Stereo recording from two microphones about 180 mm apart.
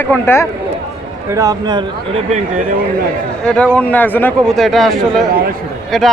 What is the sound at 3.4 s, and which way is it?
Speech, 5° left (ahead or behind).